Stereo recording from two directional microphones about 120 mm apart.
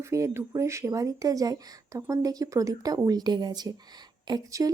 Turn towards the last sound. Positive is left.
turn(degrees=-30)  # may be behind; listen again after turning